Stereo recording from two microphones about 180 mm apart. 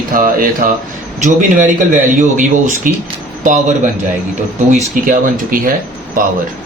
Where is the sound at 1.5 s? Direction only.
45° right (ahead or behind).